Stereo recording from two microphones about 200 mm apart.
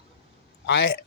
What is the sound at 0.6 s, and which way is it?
Speech, 65° left (ahead or behind).